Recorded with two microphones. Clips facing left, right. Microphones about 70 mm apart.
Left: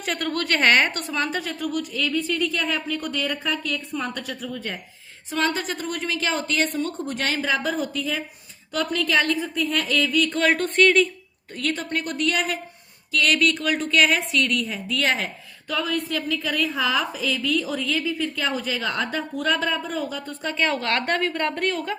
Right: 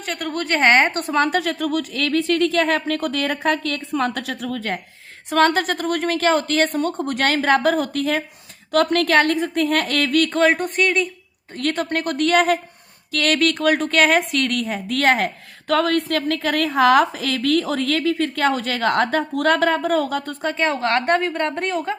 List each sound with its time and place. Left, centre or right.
0.2 s a woman's voice: centre; by 1.3 s right
1.3 s speech: right
5.3 s a woman's voice: right
10.6 s speech: centre
11.5 s speech: right
15.6 s a woman's voice: right
20.4 s a woman's voice: right